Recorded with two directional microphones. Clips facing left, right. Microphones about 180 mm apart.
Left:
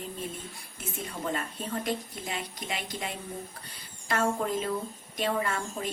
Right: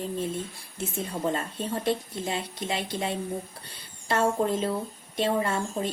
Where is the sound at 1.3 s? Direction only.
30° right (ahead or behind).